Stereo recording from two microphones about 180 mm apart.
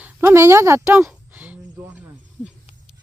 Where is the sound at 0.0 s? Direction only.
15° right (ahead or behind).